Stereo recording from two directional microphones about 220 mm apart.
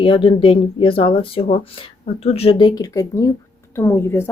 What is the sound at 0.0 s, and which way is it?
Speech, 25° left (ahead or behind).